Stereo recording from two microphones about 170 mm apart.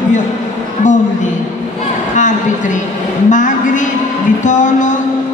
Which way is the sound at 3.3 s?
50° left (ahead or behind).